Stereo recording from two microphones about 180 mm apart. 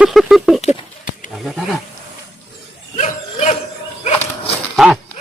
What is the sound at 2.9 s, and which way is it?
Dog, 40° left (ahead or behind).